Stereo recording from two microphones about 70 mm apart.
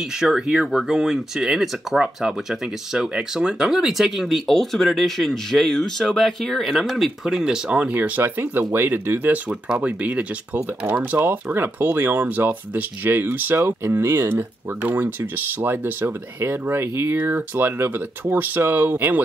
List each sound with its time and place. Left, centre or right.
0.2 s speech: centre
7.8 s speech: right
13.6 s speech: right